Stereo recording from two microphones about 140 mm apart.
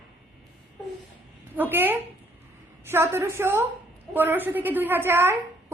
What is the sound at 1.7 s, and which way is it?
A woman's voice, 15° right (ahead or behind).